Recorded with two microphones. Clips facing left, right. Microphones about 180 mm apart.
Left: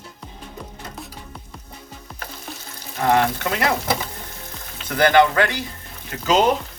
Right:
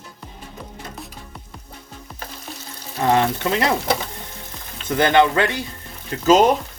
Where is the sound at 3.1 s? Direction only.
25° right (ahead or behind).